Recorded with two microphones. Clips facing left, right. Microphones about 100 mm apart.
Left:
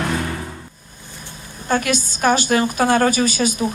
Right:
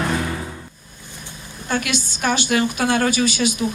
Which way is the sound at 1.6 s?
45° left (ahead or behind).